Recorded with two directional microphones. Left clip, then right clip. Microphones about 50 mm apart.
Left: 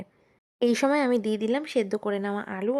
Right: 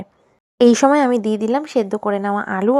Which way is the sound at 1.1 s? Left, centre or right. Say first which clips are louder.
Right 7 dB; right.